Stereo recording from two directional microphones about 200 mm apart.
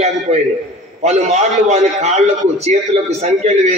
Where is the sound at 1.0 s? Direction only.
35° right (ahead or behind).